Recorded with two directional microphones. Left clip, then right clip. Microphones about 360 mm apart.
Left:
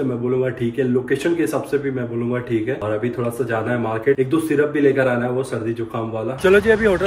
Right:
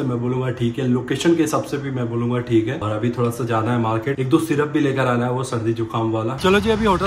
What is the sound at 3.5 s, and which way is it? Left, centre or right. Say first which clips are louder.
A man's voice: right 1 dB; centre.